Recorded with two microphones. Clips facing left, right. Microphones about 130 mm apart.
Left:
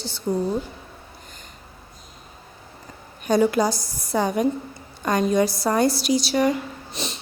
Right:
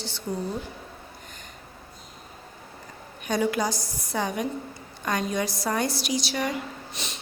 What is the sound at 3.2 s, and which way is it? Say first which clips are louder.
A woman's voice: left 6 dB; 40° left (ahead or behind).